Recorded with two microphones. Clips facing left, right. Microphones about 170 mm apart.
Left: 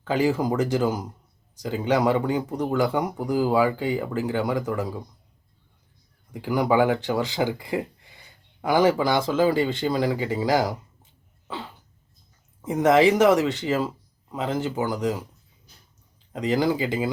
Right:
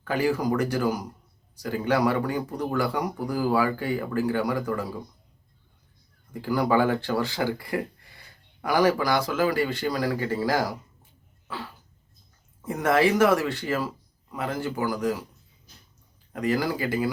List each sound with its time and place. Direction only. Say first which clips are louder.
0.0 s speech: left 2 dB; 20° left (ahead or behind)
6.3 s speech: left 2 dB; 15° left (ahead or behind)
11.4 s cough: left 2 dB; 20° left (ahead or behind)
12.6 s speech: left 4 dB; 20° left (ahead or behind)
16.3 s speech: left 3 dB; 20° left (ahead or behind)